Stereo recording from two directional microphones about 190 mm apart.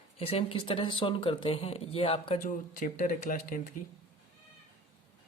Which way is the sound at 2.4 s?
45° left (ahead or behind).